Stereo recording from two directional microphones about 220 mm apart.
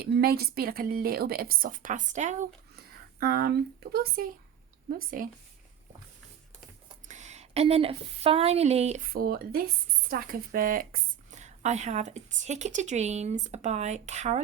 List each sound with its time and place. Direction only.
0.0 s a woman's voice: 45° right (ahead or behind)
2.7 s a woman's voice: 45° right (ahead or behind)
6.8 s speech: 30° right (ahead or behind)
9.1 s a woman's voice: 45° right (ahead or behind)